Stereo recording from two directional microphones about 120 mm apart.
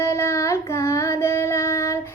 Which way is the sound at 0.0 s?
25° left (ahead or behind).